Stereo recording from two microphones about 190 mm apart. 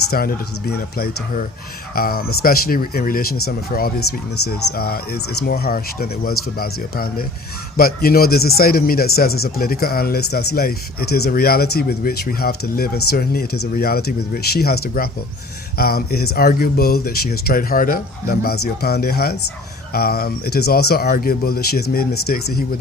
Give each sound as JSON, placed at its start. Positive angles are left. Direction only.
{"t": 0.1, "sound": "speech", "side_deg": 55}